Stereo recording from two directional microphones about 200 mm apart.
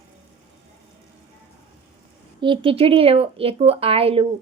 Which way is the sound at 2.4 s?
25° right (ahead or behind).